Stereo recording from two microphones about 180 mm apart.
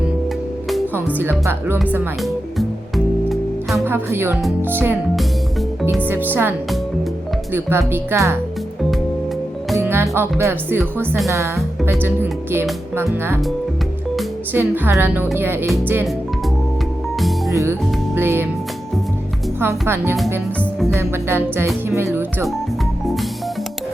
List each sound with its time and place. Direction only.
1.2 s speech: 10° right (ahead or behind)
2.2 s music: centre (ahead or behind)
3.8 s speech: 10° right (ahead or behind)
6.1 s speech: 10° right (ahead or behind)
7.5 s speech: 10° right (ahead or behind)
9.7 s speech: 15° right (ahead or behind)
14.5 s speech: 10° right (ahead or behind)
17.2 s music: centre (ahead or behind)
17.5 s speech: 15° right (ahead or behind)
20.9 s speech: 15° right (ahead or behind)